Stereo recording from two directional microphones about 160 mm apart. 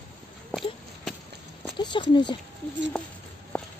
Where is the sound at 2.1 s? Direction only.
30° left (ahead or behind).